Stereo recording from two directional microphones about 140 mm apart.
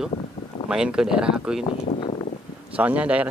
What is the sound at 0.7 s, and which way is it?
Speech, 5° right (ahead or behind).